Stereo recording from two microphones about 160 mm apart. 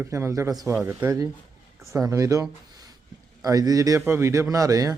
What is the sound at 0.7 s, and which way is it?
A man's voice, 10° right (ahead or behind).